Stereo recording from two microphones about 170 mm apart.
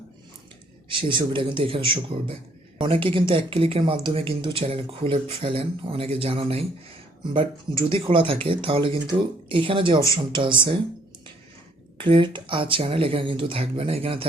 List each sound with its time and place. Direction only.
0.9 s a man's voice: 30° right (ahead or behind)
11.9 s a man's voice: 30° right (ahead or behind)